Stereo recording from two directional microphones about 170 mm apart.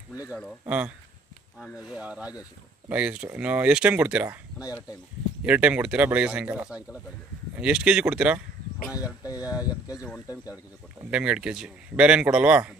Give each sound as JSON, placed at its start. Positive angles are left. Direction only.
{"t": 0.7, "sound": "speech", "side_deg": -10}
{"t": 9.2, "sound": "speech", "side_deg": 20}
{"t": 11.1, "sound": "speech", "side_deg": -5}